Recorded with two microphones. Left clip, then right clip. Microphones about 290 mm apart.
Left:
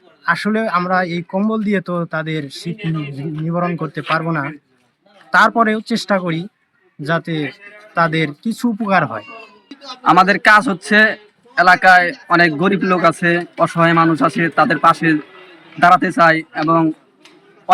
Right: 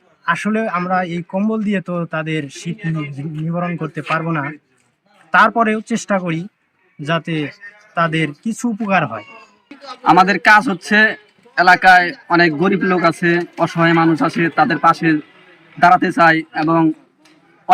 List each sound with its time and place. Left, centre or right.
0.3 s a man's voice: centre
5.8 s a man's voice: centre
8.6 s speech: centre
8.9 s a man's voice: centre